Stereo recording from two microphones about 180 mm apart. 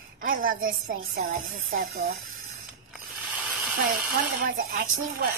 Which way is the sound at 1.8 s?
55° right (ahead or behind).